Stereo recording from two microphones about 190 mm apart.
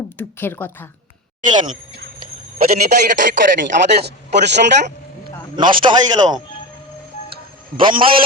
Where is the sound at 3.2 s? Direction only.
45° right (ahead or behind).